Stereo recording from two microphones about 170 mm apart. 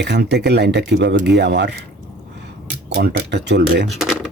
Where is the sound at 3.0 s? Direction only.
90° right.